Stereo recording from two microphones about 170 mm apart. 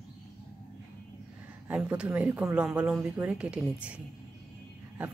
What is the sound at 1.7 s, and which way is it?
Speech, 5° right (ahead or behind).